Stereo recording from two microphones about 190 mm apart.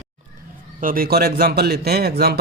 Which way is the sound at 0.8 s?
50° right (ahead or behind).